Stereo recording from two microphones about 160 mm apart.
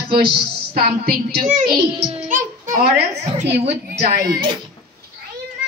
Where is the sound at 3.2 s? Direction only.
40° right (ahead or behind).